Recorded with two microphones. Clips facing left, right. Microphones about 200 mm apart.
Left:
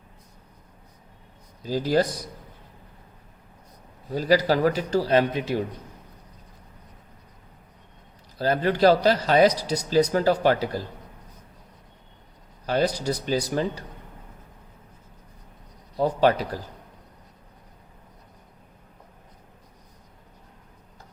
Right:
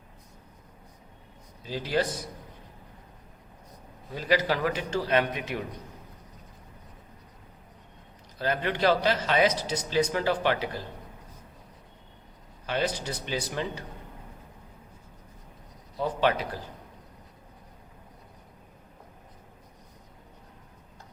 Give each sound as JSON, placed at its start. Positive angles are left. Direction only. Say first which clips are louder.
{"t": 1.6, "sound": "a man's voice", "louder": "left 6 dB", "side_deg": 40}
{"t": 4.1, "sound": "a man's voice", "louder": "left 5 dB", "side_deg": 40}
{"t": 8.4, "sound": "a man's voice", "louder": "left 6 dB", "side_deg": 35}
{"t": 12.6, "sound": "a man's voice", "louder": "left 6 dB", "side_deg": 40}
{"t": 16.0, "sound": "a man's voice", "louder": "left 5 dB", "side_deg": 40}